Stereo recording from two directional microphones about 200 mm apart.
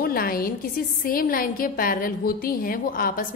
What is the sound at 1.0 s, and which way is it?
A woman's voice, 45° left (ahead or behind).